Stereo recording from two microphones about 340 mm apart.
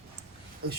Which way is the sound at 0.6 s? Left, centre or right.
Right.